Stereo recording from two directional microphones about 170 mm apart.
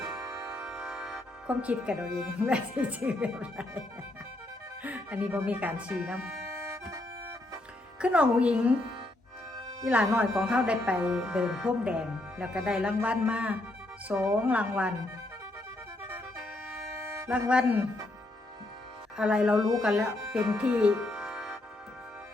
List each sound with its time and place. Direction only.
0.1 s music: 20° right (ahead or behind)
0.6 s speech: 5° right (ahead or behind)
6.5 s music: 20° right (ahead or behind)
8.0 s speech: 5° right (ahead or behind)
9.8 s speech: 10° right (ahead or behind)
17.0 s music: 15° right (ahead or behind)
17.5 s speech: 5° right (ahead or behind)
19.1 s speech: 5° right (ahead or behind)